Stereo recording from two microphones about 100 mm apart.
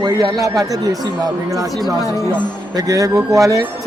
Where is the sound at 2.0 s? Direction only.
30° left (ahead or behind).